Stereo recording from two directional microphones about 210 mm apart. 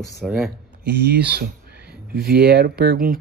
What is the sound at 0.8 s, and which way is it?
Speech, 50° right (ahead or behind).